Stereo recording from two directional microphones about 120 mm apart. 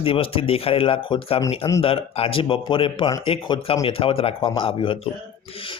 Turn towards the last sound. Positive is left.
turn(degrees=50)  # may be behind; listen again after turning